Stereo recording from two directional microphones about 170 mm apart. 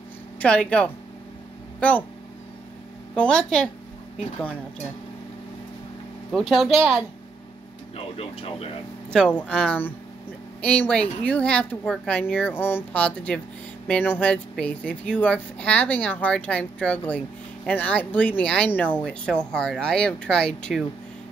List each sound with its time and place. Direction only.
0.4 s speech: 5° left (ahead or behind)
3.2 s speech: 5° left (ahead or behind)
6.3 s speech: centre (ahead or behind)
7.9 s speech: 35° left (ahead or behind)
9.1 s speech: 5° left (ahead or behind)